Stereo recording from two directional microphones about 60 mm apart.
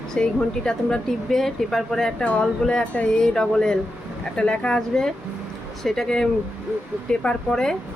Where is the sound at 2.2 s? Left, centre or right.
Left.